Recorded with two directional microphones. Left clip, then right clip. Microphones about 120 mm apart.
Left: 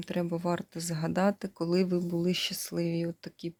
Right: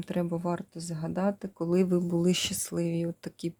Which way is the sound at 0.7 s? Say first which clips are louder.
Left 3 dB; 10° left (ahead or behind).